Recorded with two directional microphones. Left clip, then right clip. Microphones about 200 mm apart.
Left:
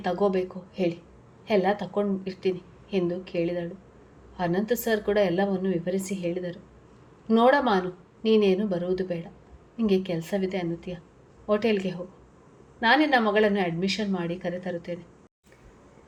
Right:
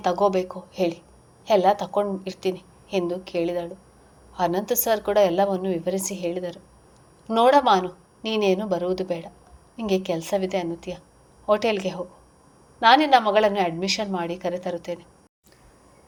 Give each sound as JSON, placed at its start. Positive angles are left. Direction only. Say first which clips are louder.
{"t": 0.0, "sound": "a woman's voice", "louder": "right 4 dB", "side_deg": -30}